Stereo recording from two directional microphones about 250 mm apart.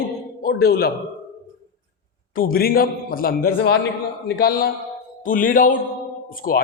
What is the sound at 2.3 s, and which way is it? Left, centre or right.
A man's voice, left.